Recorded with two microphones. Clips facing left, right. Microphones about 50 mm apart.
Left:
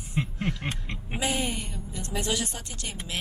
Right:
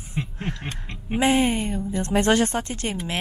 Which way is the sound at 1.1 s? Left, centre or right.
Right.